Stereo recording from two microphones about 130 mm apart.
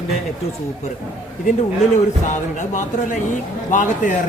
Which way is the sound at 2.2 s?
70° left (ahead or behind).